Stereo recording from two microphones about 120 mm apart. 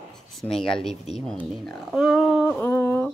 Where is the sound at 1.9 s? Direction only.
5° right (ahead or behind).